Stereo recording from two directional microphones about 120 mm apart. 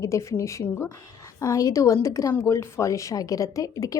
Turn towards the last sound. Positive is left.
turn(degrees=30)  # may be behind; listen again after turning